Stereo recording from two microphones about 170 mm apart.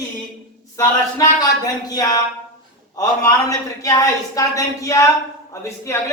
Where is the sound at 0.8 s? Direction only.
20° left (ahead or behind).